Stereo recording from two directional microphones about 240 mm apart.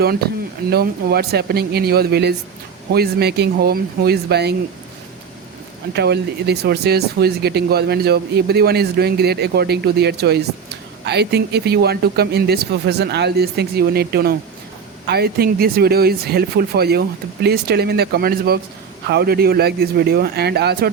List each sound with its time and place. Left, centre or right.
0.7 s speech: right
5.9 s speech: right